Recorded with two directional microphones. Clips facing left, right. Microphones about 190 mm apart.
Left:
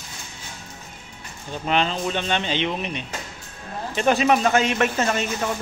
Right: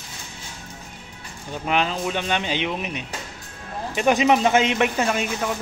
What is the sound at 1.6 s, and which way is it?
Speech, 10° right (ahead or behind).